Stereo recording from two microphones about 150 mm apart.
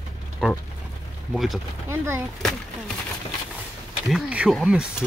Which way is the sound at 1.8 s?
20° right (ahead or behind).